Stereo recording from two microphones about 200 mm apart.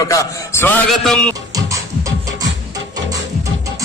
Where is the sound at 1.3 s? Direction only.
15° right (ahead or behind).